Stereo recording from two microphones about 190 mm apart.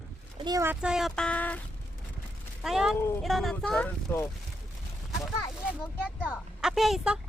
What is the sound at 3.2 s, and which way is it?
Speech, centre (ahead or behind).